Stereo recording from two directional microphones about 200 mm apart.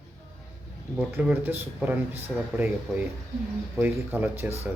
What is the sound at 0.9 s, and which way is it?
Speech, 5° right (ahead or behind).